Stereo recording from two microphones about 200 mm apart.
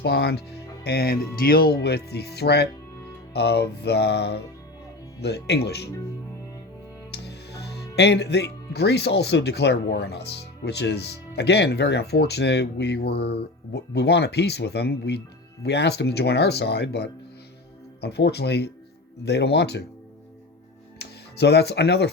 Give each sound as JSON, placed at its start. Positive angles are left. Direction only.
{"t": 0.0, "sound": "speech", "side_deg": 55}
{"t": 7.1, "sound": "speech", "side_deg": 55}
{"t": 21.0, "sound": "speech", "side_deg": 55}